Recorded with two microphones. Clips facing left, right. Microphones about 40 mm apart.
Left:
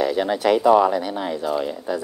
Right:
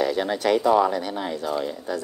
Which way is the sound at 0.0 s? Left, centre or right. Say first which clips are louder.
Left 3 dB; centre.